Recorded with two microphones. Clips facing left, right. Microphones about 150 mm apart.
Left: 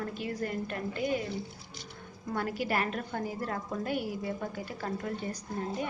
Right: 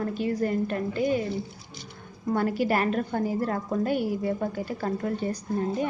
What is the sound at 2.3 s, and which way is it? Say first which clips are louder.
A woman's voice: right 7 dB; 40° right (ahead or behind).